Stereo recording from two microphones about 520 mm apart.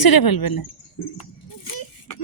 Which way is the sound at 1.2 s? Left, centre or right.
Left.